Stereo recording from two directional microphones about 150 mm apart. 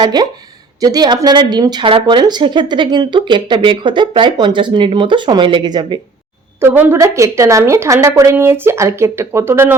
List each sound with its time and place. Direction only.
0.0 s speech: 25° right (ahead or behind)
6.6 s a woman's voice: 15° right (ahead or behind)